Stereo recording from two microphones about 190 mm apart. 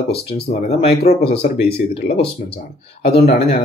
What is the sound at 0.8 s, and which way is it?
Speech, 60° left (ahead or behind).